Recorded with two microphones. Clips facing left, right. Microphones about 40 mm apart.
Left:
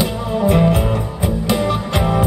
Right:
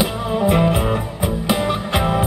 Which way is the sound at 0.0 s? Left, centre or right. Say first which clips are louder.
Left 1 dB; centre.